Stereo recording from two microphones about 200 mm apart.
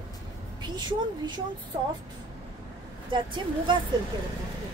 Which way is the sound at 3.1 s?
25° right (ahead or behind).